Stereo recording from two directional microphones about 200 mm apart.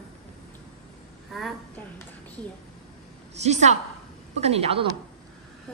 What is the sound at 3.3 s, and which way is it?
A woman's voice, 35° right (ahead or behind).